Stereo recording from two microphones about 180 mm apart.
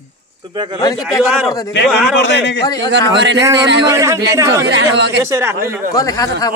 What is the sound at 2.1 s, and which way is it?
Speech, 75° left (ahead or behind).